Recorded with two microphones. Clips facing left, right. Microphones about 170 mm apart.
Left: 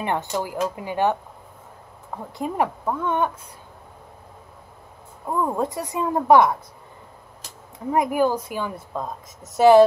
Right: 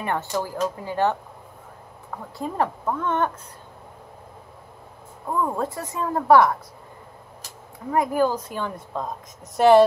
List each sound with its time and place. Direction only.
0.0 s speech: 20° left (ahead or behind)
2.3 s speech: 15° left (ahead or behind)
5.4 s speech: 15° left (ahead or behind)
7.9 s a woman's voice: 15° left (ahead or behind)